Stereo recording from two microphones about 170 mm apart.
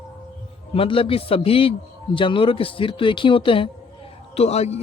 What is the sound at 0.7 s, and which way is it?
A man's voice, 35° left (ahead or behind).